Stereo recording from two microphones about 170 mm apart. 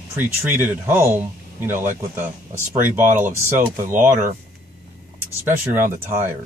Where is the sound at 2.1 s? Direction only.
15° right (ahead or behind).